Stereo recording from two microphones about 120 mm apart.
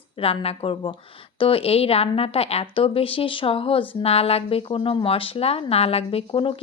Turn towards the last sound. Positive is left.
turn(degrees=50)  # may be behind; listen again after turning